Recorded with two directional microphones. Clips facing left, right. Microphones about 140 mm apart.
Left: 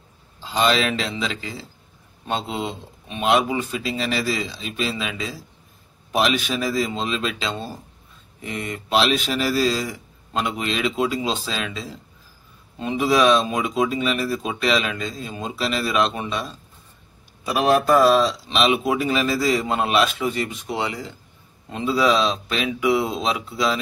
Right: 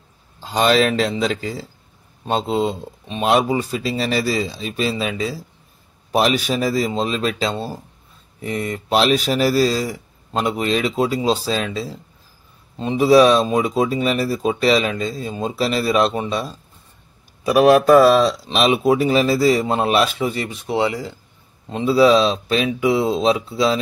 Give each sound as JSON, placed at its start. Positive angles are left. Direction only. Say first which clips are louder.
{"t": 0.4, "sound": "a man's voice", "louder": "right 4 dB", "side_deg": -45}
{"t": 18.5, "sound": "speech", "louder": "right 4 dB", "side_deg": -40}